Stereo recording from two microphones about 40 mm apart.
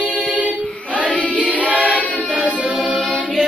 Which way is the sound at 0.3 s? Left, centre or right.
Right.